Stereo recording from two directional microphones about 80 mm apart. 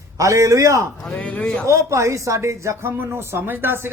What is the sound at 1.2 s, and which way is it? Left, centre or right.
Speech, centre.